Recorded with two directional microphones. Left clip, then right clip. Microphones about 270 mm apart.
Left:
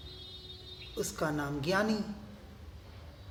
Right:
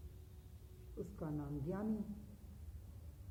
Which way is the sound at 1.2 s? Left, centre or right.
Centre.